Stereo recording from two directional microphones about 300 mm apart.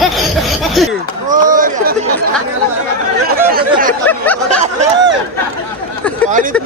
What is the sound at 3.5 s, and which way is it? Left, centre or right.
Speech, right.